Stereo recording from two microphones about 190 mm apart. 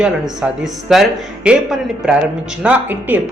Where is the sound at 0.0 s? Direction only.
5° right (ahead or behind).